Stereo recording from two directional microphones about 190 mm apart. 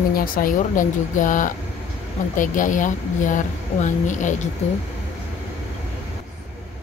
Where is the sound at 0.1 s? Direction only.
50° left (ahead or behind).